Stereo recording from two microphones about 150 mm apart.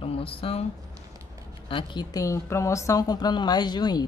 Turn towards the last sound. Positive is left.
turn(degrees=30)  # may be behind; listen again after turning